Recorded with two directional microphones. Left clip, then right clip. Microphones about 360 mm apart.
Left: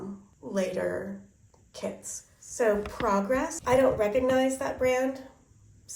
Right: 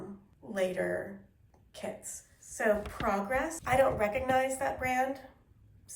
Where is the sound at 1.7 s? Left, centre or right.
Centre.